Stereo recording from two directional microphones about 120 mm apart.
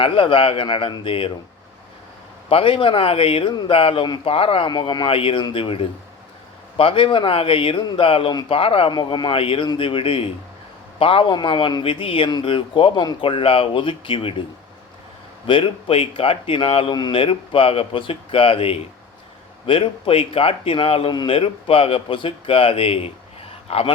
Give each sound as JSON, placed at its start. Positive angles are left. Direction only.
{"t": 0.0, "sound": "a man's voice", "side_deg": 45}
{"t": 2.5, "sound": "a man's voice", "side_deg": 50}
{"t": 8.9, "sound": "a man's voice", "side_deg": 40}
{"t": 15.4, "sound": "a man's voice", "side_deg": 45}